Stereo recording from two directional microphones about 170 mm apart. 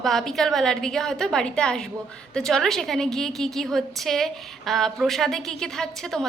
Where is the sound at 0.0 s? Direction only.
Centre (ahead or behind).